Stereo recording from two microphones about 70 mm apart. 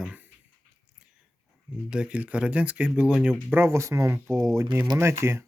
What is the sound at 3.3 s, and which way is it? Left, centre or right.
Speech, right.